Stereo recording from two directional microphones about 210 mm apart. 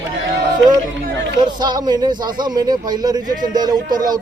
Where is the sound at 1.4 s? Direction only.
20° right (ahead or behind).